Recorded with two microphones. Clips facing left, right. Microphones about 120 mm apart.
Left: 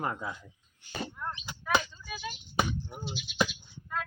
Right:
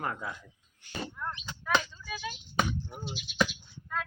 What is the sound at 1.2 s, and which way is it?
Chop, 5° left (ahead or behind).